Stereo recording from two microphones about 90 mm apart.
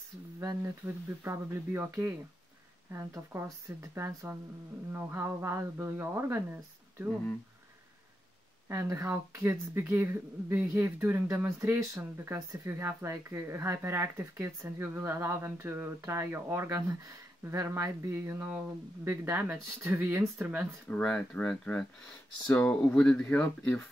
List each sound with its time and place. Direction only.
0.4 s speech: 35° right (ahead or behind)
8.6 s speech: 35° right (ahead or behind)
20.9 s speech: 15° left (ahead or behind)